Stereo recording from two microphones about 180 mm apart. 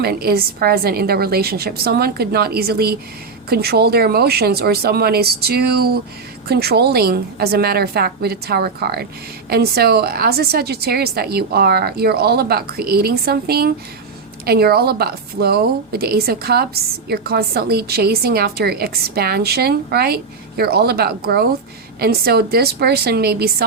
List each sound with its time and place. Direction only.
0.0 s a woman's voice: 60° right (ahead or behind)